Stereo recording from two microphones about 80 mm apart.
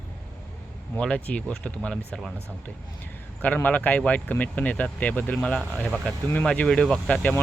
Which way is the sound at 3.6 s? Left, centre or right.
Centre.